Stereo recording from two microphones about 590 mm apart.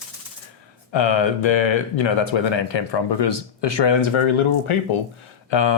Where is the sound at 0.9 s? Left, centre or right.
Left.